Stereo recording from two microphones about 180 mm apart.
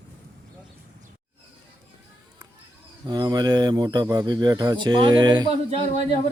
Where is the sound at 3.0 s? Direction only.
20° right (ahead or behind).